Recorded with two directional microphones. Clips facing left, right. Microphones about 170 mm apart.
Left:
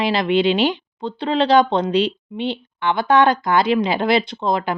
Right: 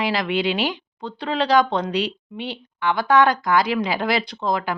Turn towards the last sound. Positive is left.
turn(degrees=25)  # may be behind; listen again after turning